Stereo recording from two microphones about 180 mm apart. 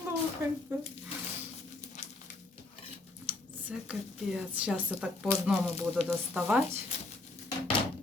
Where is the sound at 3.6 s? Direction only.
5° right (ahead or behind).